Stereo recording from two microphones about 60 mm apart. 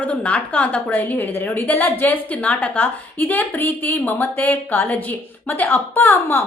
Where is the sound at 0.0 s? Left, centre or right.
Left.